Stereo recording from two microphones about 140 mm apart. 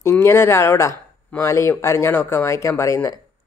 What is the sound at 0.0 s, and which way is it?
Speech, 20° left (ahead or behind).